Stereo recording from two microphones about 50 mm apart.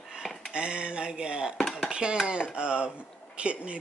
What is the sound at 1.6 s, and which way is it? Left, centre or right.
Dishes, centre.